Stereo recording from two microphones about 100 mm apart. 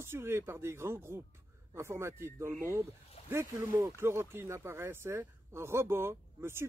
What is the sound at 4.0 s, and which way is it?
Speech, 25° right (ahead or behind).